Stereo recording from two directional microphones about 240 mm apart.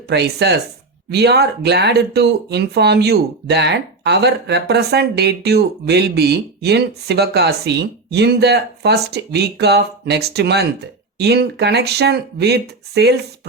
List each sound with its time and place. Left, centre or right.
0.1 s speech: right